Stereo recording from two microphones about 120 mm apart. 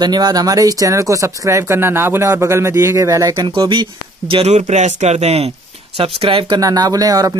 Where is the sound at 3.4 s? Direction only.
40° right (ahead or behind).